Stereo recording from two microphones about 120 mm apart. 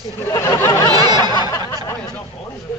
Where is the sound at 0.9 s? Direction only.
35° right (ahead or behind).